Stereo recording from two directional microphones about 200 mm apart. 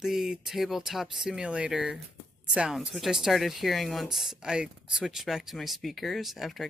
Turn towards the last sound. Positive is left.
turn(degrees=0)  # may be behind; listen again after turning